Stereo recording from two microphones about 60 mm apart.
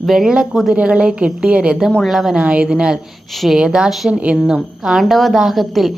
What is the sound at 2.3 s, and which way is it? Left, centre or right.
Speech, centre.